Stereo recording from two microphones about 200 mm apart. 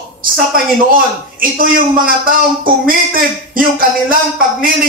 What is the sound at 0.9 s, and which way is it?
A man's voice, 45° right (ahead or behind).